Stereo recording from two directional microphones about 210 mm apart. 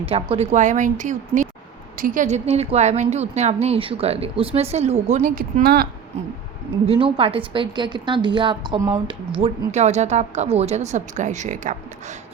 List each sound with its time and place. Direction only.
0.0 s a woman's voice: 30° right (ahead or behind); by 5.9 s 45° right (ahead or behind)
6.8 s a woman's voice: 25° right (ahead or behind)